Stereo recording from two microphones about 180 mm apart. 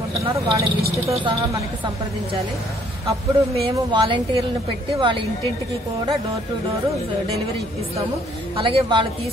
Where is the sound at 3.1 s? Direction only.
30° right (ahead or behind).